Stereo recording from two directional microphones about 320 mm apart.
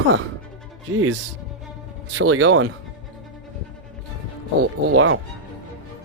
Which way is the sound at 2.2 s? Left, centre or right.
Right.